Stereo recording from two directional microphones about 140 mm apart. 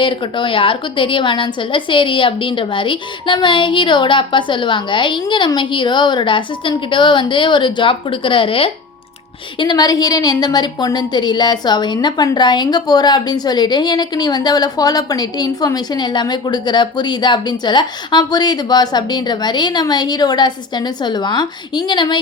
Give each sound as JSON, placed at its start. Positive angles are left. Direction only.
{"t": 0.0, "sound": "a woman's voice", "side_deg": 35}
{"t": 9.6, "sound": "a woman's voice", "side_deg": 30}